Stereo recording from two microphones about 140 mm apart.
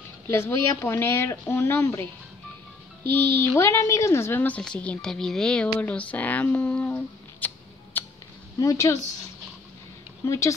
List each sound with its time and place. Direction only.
0.3 s a woman's voice: 20° left (ahead or behind)
8.5 s speech: 25° left (ahead or behind)
10.2 s speech: 20° left (ahead or behind)